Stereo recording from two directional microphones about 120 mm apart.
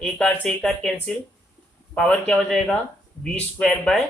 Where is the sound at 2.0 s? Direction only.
10° left (ahead or behind).